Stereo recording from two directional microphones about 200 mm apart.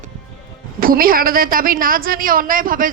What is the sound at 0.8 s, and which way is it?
A woman's voice, 45° right (ahead or behind).